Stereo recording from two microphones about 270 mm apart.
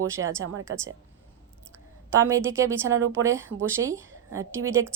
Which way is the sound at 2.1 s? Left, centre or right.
Centre.